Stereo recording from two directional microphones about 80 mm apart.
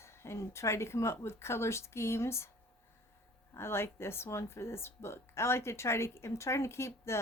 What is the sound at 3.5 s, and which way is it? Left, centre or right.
Speech, left.